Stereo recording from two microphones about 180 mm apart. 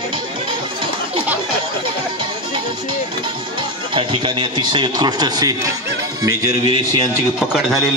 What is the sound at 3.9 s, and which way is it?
A man's voice, 30° right (ahead or behind).